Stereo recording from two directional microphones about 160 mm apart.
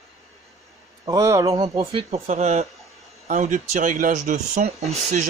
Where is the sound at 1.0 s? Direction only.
20° right (ahead or behind).